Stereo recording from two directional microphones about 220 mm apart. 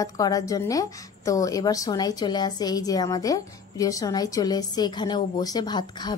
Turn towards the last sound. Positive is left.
turn(degrees=20)  # may be behind; listen again after turning